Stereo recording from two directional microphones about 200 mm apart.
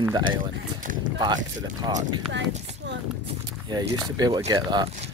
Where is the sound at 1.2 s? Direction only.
20° right (ahead or behind).